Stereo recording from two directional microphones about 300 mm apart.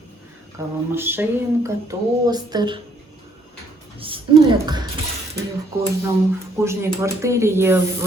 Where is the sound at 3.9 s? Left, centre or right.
Centre.